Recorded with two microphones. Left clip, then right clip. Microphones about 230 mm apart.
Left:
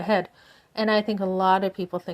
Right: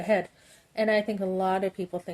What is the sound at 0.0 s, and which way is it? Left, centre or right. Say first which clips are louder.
A woman's voice: left 2 dB; left.